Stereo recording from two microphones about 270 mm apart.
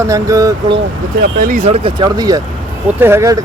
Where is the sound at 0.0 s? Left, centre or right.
Centre.